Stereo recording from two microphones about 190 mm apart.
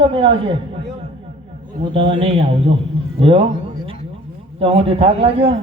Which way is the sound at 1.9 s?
30° right (ahead or behind).